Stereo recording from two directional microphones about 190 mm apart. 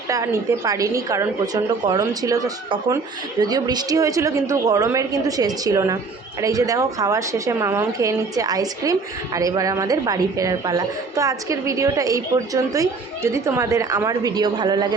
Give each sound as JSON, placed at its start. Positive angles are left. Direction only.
{"t": 0.1, "sound": "a woman's voice", "side_deg": -15}